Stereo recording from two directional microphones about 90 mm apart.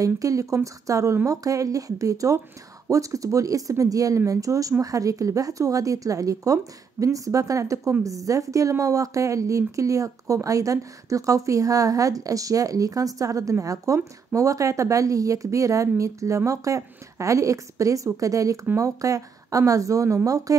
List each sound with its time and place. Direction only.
0.0 s speech: 40° right (ahead or behind)